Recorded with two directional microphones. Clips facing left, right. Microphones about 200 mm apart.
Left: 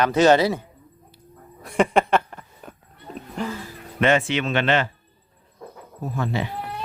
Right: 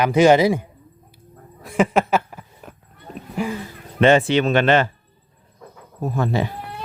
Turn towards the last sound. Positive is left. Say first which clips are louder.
# right 4 dB
turn(degrees=-40)  # may be behind; listen again after turning